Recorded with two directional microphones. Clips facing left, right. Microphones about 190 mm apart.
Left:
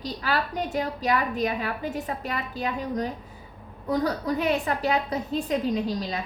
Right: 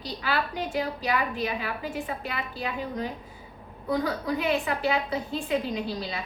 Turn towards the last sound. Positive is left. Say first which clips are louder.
# left 4 dB
turn(degrees=40)  # may be behind; listen again after turning